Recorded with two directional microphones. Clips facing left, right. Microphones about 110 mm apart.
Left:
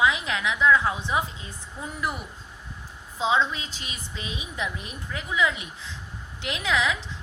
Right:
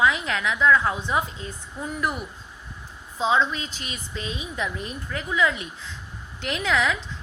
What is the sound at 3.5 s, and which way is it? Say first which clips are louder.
A woman's voice: right 3 dB; 20° left (ahead or behind).